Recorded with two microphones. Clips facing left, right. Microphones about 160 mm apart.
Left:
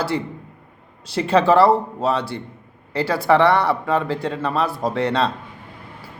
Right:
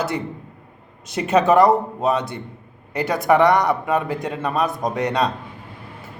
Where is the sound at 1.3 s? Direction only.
20° right (ahead or behind).